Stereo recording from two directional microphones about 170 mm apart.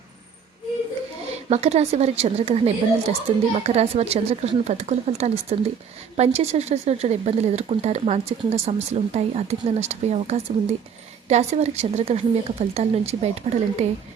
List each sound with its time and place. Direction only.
1.5 s a woman's voice: 40° right (ahead or behind)